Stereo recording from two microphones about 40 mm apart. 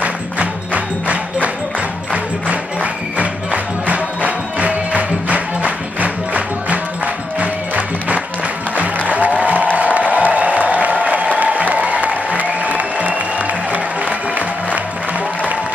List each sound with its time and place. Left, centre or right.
0.0 s music: right
9.0 s applause: right